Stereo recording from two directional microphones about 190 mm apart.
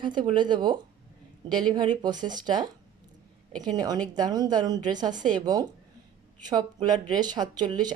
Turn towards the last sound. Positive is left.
turn(degrees=-20)  # may be behind; listen again after turning